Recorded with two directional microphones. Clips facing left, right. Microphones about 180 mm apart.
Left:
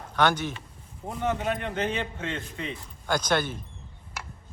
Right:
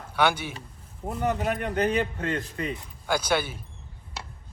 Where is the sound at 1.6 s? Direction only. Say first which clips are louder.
Right 4 dB; 40° right (ahead or behind).